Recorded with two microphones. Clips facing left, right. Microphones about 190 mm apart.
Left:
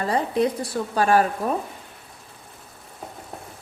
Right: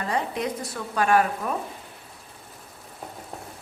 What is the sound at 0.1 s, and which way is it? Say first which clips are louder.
Sizzle: left 6 dB; 30° left (ahead or behind).